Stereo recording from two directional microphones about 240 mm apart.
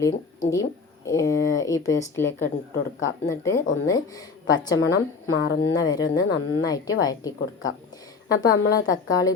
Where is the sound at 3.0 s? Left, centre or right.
Left.